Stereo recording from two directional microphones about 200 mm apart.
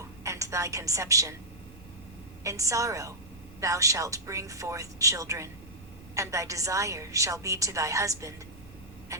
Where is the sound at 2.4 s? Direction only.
15° right (ahead or behind).